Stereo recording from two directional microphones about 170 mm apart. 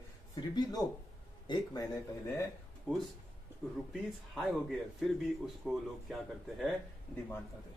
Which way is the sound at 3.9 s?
Centre (ahead or behind).